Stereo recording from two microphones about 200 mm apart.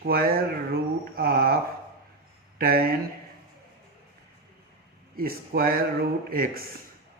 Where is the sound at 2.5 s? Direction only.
50° right (ahead or behind).